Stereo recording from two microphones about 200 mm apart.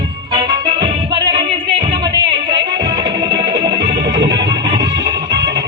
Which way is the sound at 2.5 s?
60° right (ahead or behind).